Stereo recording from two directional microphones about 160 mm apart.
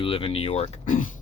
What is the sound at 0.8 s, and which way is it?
Speech, 55° left (ahead or behind).